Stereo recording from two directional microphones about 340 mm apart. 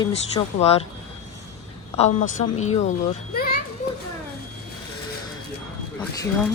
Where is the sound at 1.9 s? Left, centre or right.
Left.